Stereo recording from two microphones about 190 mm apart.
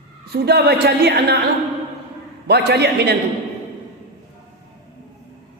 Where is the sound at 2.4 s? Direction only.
60° right (ahead or behind).